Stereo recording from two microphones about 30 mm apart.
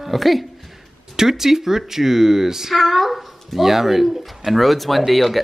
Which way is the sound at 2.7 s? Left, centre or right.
Centre.